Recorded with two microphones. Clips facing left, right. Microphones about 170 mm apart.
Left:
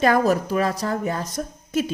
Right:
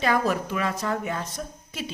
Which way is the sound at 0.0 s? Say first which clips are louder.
Left 5 dB; 45° left (ahead or behind).